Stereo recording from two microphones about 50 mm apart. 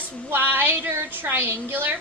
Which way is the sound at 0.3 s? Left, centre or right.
Right.